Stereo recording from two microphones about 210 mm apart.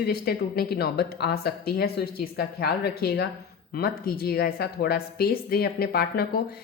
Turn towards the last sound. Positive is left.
turn(degrees=45)  # may be behind; listen again after turning